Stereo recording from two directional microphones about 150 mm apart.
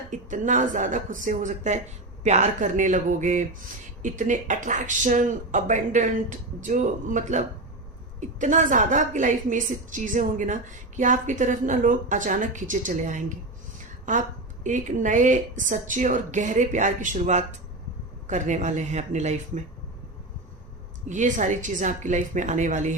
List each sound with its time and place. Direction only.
0.1 s a woman's voice: 55° right (ahead or behind)
21.1 s a woman's voice: 55° right (ahead or behind)